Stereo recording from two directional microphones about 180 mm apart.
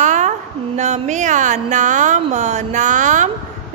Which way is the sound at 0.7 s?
40° right (ahead or behind).